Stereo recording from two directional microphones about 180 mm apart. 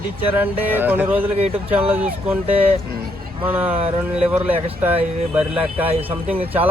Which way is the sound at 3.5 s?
10° right (ahead or behind).